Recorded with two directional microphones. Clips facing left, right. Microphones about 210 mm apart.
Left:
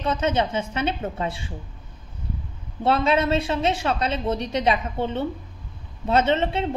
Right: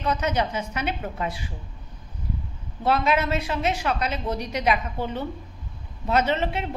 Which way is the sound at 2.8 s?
30° left (ahead or behind).